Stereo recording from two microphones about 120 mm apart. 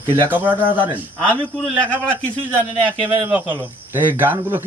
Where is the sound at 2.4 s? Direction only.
45° right (ahead or behind).